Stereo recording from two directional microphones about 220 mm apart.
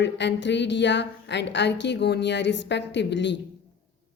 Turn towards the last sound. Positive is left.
turn(degrees=50)  # may be behind; listen again after turning